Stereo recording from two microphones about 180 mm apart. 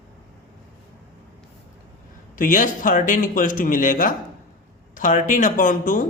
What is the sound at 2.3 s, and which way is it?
A man's voice, 50° left (ahead or behind).